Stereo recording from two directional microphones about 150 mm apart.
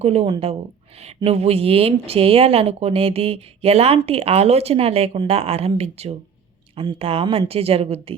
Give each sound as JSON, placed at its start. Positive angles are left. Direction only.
{"t": 0.0, "sound": "speech", "side_deg": -45}